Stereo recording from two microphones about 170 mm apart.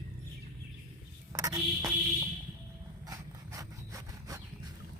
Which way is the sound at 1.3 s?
20° right (ahead or behind).